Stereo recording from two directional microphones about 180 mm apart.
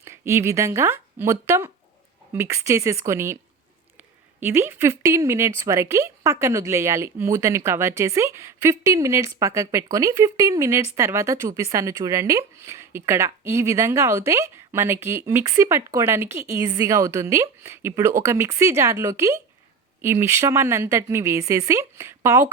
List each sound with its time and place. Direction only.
0.0 s speech: 15° right (ahead or behind)
4.4 s speech: 10° right (ahead or behind)